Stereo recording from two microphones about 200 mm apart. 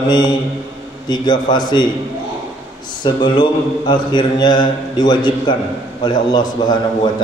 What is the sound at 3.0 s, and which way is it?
A man's voice, 25° left (ahead or behind).